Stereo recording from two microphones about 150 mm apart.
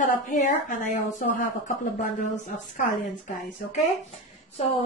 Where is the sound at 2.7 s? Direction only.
55° left (ahead or behind).